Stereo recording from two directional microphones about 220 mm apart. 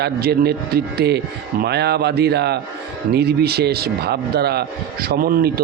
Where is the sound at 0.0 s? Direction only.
50° right (ahead or behind).